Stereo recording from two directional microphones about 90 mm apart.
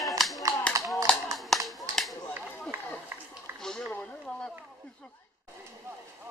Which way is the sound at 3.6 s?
5° left (ahead or behind).